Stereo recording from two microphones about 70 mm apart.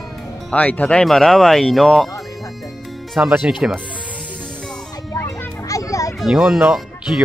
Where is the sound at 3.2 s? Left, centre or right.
Centre.